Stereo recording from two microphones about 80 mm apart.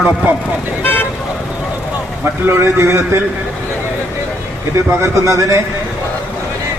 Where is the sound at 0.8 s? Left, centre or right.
Left.